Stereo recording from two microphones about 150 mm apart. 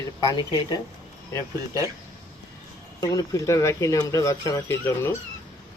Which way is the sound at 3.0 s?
25° left (ahead or behind).